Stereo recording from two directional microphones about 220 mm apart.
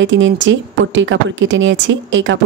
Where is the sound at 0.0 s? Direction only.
55° right (ahead or behind).